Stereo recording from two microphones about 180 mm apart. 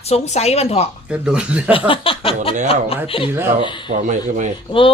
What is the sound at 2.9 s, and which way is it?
Speech, 30° left (ahead or behind).